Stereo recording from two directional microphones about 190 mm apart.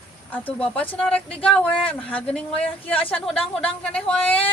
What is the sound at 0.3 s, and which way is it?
Speech, 10° left (ahead or behind).